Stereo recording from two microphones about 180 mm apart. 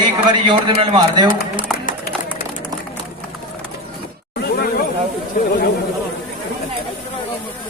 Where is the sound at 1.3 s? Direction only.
50° left (ahead or behind).